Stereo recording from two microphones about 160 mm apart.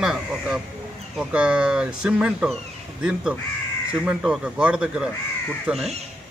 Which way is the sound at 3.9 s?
5° right (ahead or behind).